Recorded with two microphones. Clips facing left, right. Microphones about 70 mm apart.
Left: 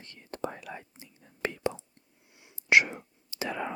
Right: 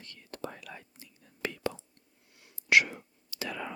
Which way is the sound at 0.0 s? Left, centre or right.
Left.